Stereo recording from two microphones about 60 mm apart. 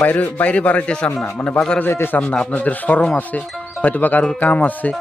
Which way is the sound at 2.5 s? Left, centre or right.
Left.